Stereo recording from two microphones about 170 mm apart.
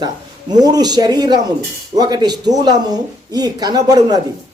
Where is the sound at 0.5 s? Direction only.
25° right (ahead or behind).